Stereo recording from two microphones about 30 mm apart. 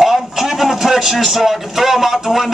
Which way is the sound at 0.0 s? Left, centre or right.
Centre.